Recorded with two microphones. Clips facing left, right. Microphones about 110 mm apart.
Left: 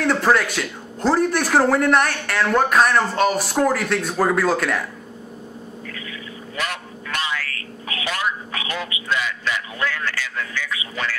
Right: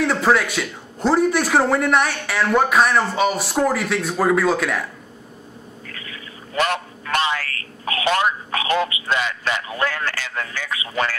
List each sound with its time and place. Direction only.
0.0 s a man's voice: centre (ahead or behind)
5.9 s a sound: 45° right (ahead or behind)
6.6 s honk: 65° right (ahead or behind)
7.3 s a sound: 45° right (ahead or behind)
8.0 s speech: 65° right (ahead or behind)
8.8 s a man's voice: 50° right (ahead or behind)